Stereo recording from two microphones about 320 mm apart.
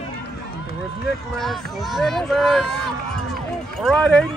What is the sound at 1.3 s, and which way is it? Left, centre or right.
Speech, centre.